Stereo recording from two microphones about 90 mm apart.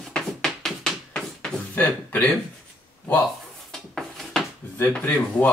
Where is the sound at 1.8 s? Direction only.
20° left (ahead or behind).